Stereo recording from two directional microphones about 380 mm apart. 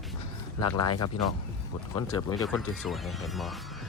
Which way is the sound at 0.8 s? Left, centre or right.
Left.